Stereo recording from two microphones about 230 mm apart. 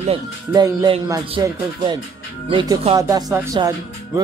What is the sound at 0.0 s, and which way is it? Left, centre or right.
Speech, right.